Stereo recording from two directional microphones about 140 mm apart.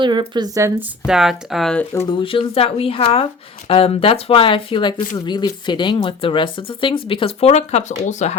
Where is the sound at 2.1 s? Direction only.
35° left (ahead or behind).